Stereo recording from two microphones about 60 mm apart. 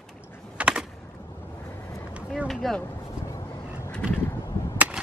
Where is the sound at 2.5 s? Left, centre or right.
Centre.